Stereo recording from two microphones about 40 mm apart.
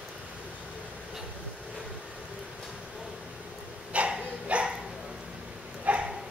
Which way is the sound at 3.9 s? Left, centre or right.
Right.